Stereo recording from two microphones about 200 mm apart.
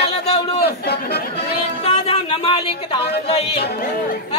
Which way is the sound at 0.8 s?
55° left (ahead or behind).